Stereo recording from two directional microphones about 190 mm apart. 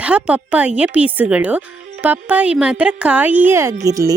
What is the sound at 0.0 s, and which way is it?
Speech, 5° right (ahead or behind).